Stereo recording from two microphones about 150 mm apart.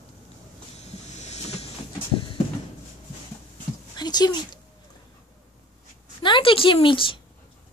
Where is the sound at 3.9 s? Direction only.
25° left (ahead or behind).